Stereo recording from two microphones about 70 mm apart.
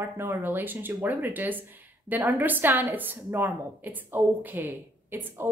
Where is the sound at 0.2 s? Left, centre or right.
Right.